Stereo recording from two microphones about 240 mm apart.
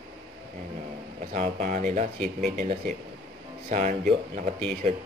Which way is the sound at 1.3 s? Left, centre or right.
Right.